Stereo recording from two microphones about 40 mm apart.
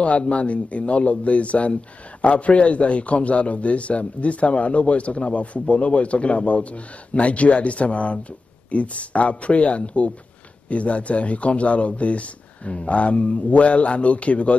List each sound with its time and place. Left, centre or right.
0.0 s a man's voice: left